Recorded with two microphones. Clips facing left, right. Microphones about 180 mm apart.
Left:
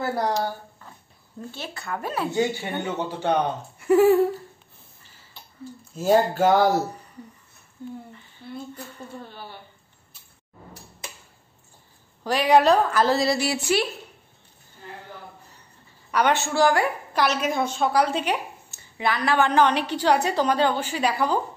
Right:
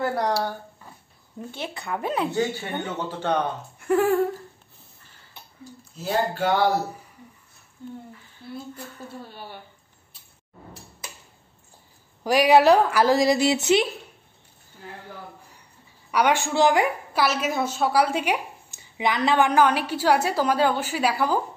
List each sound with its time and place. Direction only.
0.0 s speech: centre (ahead or behind)
1.5 s speech: 20° right (ahead or behind)
2.3 s speech: 15° left (ahead or behind)
3.8 s a sound: 5° left (ahead or behind)
5.9 s speech: 40° left (ahead or behind)
8.1 s a sound: centre (ahead or behind)
12.2 s a woman's voice: 10° right (ahead or behind)
16.1 s a woman's voice: 10° right (ahead or behind)
17.1 s a woman's voice: 5° right (ahead or behind)